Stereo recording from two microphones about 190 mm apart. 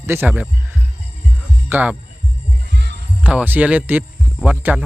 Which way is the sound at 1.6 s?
10° right (ahead or behind).